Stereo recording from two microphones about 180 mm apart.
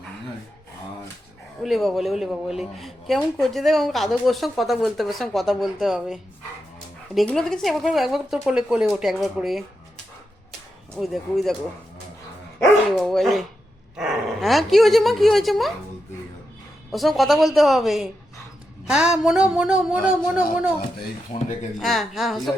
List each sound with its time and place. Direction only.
1.6 s a woman's voice: centre (ahead or behind)
10.9 s a woman's voice: centre (ahead or behind)
12.9 s a woman's voice: centre (ahead or behind)
16.9 s a woman's voice: centre (ahead or behind)
21.3 s speech: 35° left (ahead or behind)
21.8 s a woman's voice: centre (ahead or behind)